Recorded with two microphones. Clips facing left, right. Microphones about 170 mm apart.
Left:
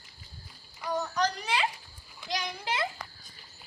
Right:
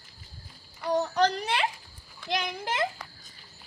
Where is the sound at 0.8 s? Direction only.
30° right (ahead or behind).